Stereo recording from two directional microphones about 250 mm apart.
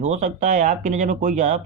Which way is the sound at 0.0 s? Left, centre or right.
Right.